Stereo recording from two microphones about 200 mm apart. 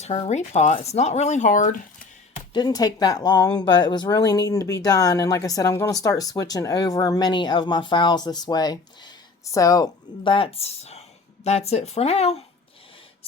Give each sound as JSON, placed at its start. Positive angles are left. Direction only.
{"t": 0.0, "sound": "speech", "side_deg": 35}
{"t": 2.5, "sound": "speech", "side_deg": 20}